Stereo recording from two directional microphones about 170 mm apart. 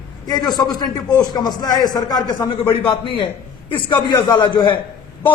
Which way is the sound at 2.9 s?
30° left (ahead or behind).